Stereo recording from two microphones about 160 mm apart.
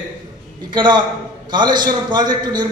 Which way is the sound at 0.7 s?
30° right (ahead or behind).